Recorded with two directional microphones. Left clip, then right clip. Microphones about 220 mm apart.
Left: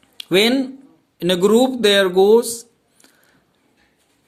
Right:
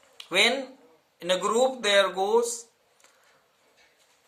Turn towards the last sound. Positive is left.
turn(degrees=40)  # may be behind; listen again after turning